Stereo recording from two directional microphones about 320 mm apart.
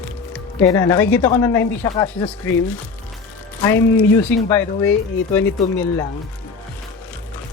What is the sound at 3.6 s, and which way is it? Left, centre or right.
Speech, centre.